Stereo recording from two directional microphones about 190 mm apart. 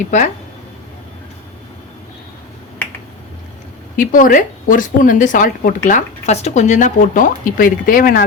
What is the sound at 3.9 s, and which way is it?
Speech, 45° left (ahead or behind).